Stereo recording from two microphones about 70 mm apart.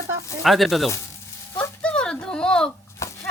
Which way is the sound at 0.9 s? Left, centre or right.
Left.